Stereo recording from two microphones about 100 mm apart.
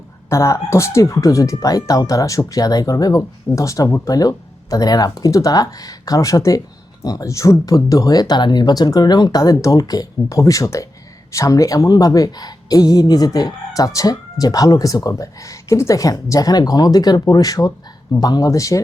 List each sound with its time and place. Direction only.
0.3 s speech: 30° left (ahead or behind)